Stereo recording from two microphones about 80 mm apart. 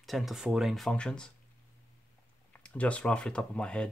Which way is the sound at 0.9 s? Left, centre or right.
Centre.